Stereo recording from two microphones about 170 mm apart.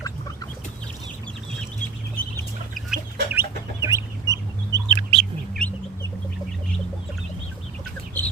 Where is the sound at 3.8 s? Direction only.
20° right (ahead or behind).